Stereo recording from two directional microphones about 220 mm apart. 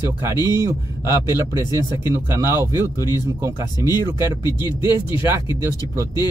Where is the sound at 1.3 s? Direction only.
20° left (ahead or behind).